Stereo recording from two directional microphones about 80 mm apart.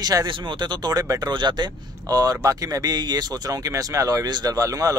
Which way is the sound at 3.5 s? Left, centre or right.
Right.